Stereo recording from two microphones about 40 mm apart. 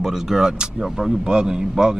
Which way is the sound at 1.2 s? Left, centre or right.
Centre.